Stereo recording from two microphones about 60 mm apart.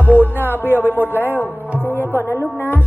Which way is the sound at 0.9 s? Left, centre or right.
Left.